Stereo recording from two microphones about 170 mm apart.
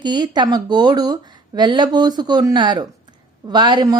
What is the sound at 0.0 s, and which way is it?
A woman's voice, 25° right (ahead or behind).